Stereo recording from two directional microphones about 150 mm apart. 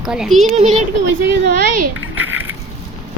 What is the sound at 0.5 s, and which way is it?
Speech, 50° right (ahead or behind).